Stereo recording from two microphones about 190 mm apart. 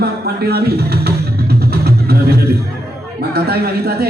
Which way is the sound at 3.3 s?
55° right (ahead or behind).